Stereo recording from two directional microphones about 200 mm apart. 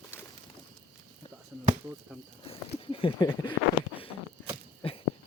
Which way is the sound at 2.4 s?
30° left (ahead or behind).